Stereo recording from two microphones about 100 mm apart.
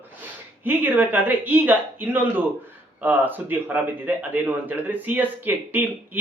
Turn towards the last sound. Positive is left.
turn(degrees=-20)  # may be behind; listen again after turning